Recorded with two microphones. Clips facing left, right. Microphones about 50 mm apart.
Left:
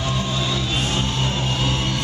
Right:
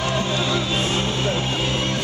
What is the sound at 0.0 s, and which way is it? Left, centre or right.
Music, right.